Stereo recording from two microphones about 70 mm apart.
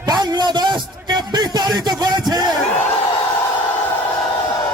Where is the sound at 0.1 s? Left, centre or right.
Right.